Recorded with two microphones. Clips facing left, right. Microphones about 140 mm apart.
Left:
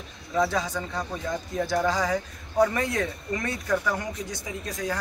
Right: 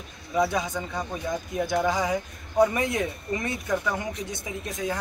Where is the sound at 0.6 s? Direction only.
20° right (ahead or behind).